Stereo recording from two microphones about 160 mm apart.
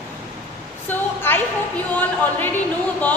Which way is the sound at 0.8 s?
15° left (ahead or behind).